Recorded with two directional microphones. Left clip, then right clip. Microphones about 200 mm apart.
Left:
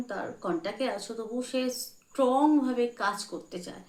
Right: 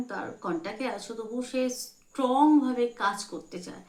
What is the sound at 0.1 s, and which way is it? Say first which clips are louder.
A woman's voice: left 2 dB; 10° right (ahead or behind).